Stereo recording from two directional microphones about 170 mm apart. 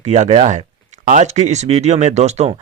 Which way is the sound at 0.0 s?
40° right (ahead or behind).